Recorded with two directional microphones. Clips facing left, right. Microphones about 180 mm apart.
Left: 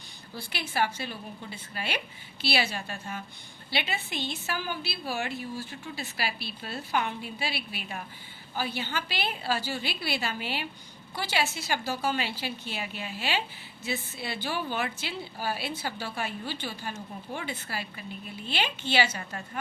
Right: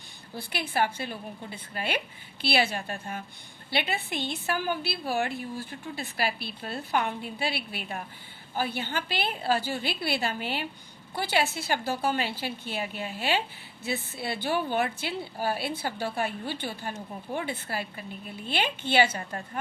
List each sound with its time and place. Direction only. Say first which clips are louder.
0.3 s a woman's voice: right 2 dB; 55° right (ahead or behind)